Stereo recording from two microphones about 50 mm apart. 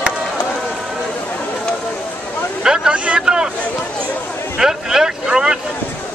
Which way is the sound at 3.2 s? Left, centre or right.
Centre.